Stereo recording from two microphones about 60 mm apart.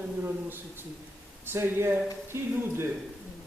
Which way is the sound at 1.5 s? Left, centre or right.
Right.